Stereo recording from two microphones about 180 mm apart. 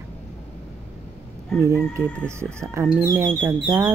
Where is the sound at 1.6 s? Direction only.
15° right (ahead or behind).